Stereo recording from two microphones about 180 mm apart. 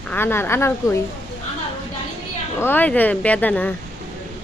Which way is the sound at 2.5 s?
10° left (ahead or behind).